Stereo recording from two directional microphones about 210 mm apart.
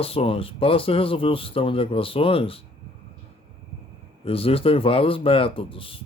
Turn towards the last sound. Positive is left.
turn(degrees=25)  # may be behind; listen again after turning